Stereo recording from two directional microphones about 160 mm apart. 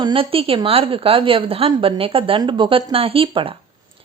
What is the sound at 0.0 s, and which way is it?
A woman's voice, 35° right (ahead or behind).